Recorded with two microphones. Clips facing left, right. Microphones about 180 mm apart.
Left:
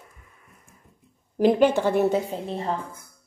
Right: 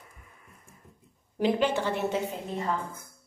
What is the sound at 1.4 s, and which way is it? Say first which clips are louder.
Speech: left 7 dB; 50° left (ahead or behind).